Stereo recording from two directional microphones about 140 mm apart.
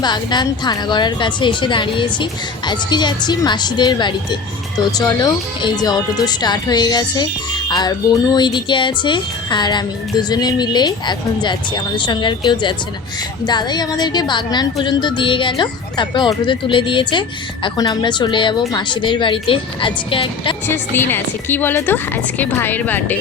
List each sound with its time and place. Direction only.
0.0 s a woman's voice: 30° left (ahead or behind)
13.4 s a woman's voice: 30° left (ahead or behind)
20.7 s a woman's voice: 15° left (ahead or behind)